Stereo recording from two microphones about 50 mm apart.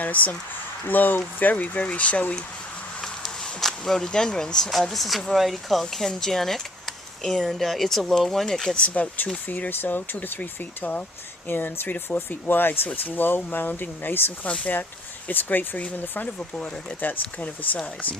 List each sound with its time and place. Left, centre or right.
0.0 s speech: left
3.0 s a sound: centre
4.7 s speech: centre
8.7 s speech: left
14.4 s speech: left
16.4 s speech: left
17.0 s speech: left